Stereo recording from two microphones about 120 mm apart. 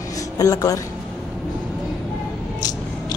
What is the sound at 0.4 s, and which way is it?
Speech, 30° left (ahead or behind).